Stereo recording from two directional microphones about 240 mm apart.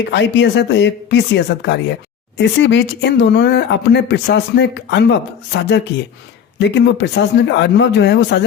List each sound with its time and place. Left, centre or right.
0.1 s speech: left